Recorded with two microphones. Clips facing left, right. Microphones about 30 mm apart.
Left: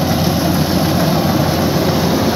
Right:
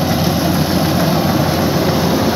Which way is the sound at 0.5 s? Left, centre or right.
Right.